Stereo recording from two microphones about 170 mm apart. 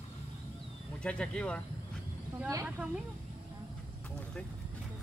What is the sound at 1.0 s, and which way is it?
Speech, 5° left (ahead or behind).